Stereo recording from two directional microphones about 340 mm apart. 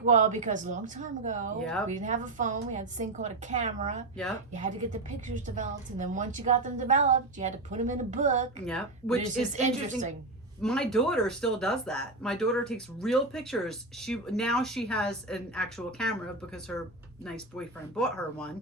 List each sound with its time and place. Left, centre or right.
0.0 s a woman's voice: right
8.6 s speech: centre
9.1 s a woman's voice: right
10.6 s speech: centre
17.2 s speech: centre